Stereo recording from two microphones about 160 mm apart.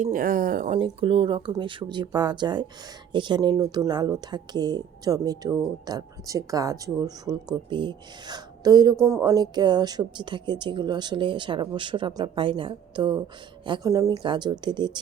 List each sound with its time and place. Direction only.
0.0 s speech: 60° right (ahead or behind)
0.8 s speech: 35° right (ahead or behind)